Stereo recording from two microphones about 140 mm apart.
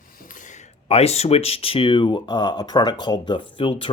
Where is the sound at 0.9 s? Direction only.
50° left (ahead or behind).